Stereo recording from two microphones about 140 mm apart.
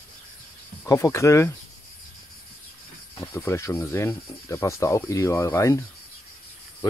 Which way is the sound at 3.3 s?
20° left (ahead or behind).